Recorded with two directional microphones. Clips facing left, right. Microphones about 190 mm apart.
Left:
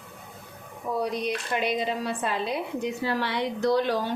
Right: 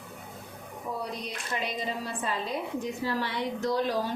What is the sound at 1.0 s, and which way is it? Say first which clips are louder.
A woman's voice: left 8 dB; 70° left (ahead or behind).